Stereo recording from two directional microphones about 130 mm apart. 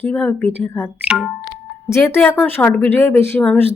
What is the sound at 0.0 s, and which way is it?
Speech, 15° left (ahead or behind).